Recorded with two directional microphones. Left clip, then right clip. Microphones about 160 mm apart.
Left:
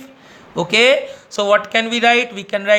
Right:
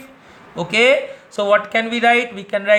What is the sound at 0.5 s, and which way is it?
Speech, 35° left (ahead or behind).